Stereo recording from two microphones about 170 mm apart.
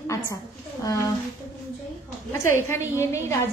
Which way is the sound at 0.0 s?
20° left (ahead or behind).